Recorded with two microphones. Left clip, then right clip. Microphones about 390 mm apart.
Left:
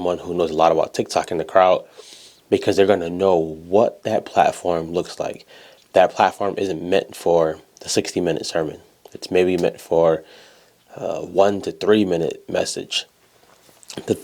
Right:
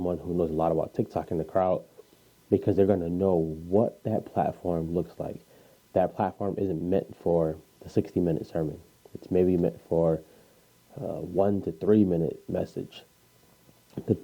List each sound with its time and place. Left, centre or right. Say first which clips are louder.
0.0 s speech: left 8 dB; centre
3.3 s speech: left 8 dB; left
3.8 s speech: left 9 dB; centre